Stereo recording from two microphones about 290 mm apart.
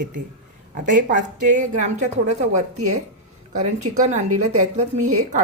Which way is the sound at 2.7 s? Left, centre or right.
Right.